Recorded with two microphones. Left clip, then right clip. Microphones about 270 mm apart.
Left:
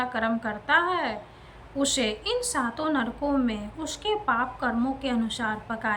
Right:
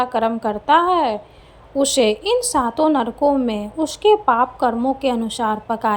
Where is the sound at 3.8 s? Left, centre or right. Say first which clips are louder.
Right 12 dB; centre.